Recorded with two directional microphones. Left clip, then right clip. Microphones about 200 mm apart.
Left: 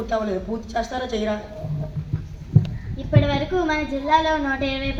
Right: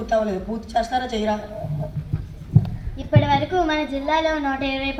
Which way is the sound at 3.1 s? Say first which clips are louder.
Right 3 dB; 50° right (ahead or behind).